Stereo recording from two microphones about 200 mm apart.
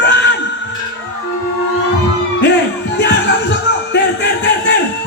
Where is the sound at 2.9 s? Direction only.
60° left (ahead or behind).